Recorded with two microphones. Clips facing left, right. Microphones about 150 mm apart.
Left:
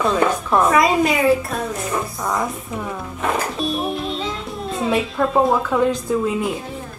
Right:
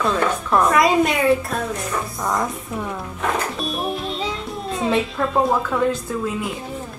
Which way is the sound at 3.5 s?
Centre (ahead or behind).